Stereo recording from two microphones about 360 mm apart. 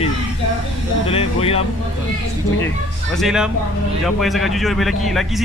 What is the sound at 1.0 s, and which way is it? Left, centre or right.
Speech, centre.